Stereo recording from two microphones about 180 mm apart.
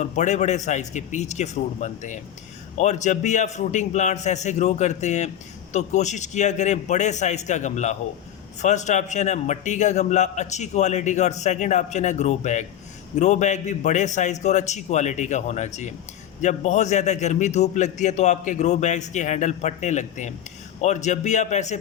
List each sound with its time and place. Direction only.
0.0 s a man's voice: 40° left (ahead or behind)